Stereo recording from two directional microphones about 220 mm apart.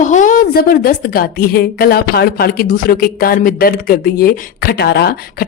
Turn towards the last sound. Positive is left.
turn(degrees=50)  # may be behind; listen again after turning